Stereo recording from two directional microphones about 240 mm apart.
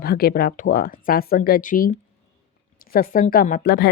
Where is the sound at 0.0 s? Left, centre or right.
Left.